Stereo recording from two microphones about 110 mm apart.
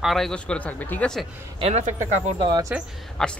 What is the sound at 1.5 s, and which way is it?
Speech, 75° right (ahead or behind).